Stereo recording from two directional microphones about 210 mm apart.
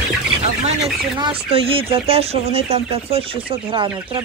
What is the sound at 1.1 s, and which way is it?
Speech, 25° right (ahead or behind).